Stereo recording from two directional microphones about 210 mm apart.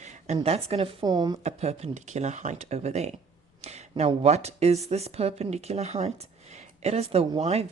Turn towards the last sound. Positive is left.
turn(degrees=-30)  # may be behind; listen again after turning